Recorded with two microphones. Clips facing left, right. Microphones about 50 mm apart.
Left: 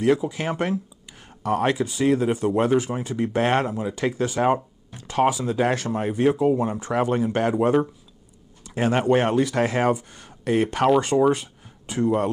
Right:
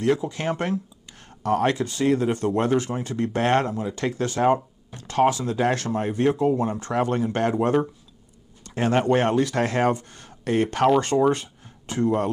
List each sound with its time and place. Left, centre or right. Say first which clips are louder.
0.0 s speech: left 2 dB; centre